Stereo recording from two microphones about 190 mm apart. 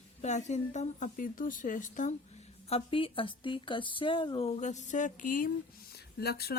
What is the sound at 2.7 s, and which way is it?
Speech, 30° left (ahead or behind).